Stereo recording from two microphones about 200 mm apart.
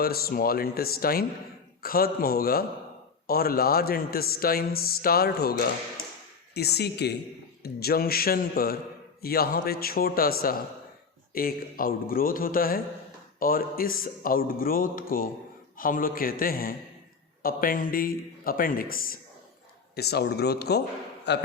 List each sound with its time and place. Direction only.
0.0 s a man's voice: 50° left (ahead or behind)